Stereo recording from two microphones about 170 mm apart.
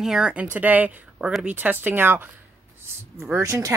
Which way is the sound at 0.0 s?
5° right (ahead or behind).